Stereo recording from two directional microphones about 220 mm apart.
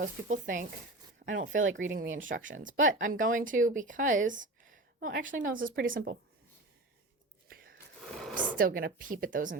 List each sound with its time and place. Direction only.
0.0 s speech: 35° right (ahead or behind)
1.7 s speech: 60° right (ahead or behind)
2.0 s speech: 35° right (ahead or behind)
7.5 s a sound: 40° right (ahead or behind)
8.5 s speech: 40° right (ahead or behind)